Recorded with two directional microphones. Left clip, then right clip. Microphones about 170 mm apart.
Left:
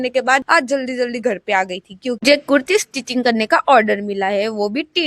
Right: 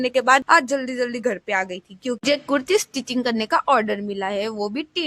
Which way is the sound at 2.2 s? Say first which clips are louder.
Left 8 dB; 35° left (ahead or behind).